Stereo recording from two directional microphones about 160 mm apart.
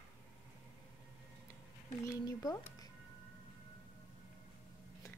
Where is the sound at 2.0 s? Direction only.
20° left (ahead or behind).